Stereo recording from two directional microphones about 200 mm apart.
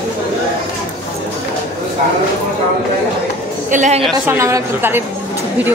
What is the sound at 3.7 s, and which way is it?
Speech, 40° right (ahead or behind).